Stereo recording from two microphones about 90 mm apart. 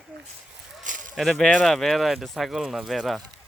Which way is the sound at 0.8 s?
Centre (ahead or behind).